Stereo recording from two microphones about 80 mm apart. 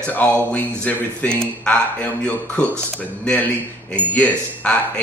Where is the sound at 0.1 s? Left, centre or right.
Left.